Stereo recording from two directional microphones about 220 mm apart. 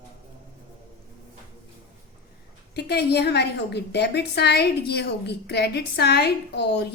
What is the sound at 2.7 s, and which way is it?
A woman's voice, 45° left (ahead or behind).